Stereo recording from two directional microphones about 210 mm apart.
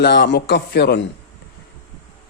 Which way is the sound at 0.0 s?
50° left (ahead or behind).